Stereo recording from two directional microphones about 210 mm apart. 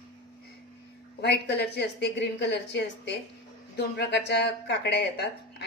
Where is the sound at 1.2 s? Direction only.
50° left (ahead or behind).